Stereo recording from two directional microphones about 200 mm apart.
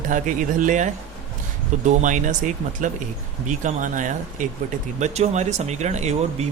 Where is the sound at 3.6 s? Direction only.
40° right (ahead or behind).